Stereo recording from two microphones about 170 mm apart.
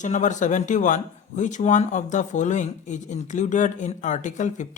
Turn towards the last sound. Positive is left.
turn(degrees=45)  # may be behind; listen again after turning